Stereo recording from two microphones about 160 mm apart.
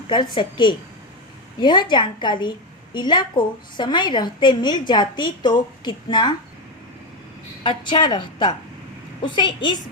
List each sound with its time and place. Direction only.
0.1 s a woman's voice: 30° left (ahead or behind)
7.6 s a woman's voice: 30° left (ahead or behind)